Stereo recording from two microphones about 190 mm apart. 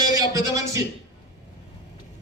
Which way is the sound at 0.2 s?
15° right (ahead or behind).